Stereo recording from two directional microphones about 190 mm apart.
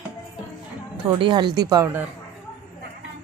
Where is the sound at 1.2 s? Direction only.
25° right (ahead or behind).